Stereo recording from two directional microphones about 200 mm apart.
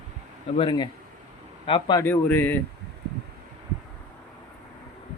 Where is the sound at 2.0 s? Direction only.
10° left (ahead or behind).